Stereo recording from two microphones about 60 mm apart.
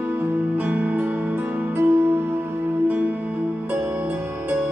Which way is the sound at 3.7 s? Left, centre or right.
Right.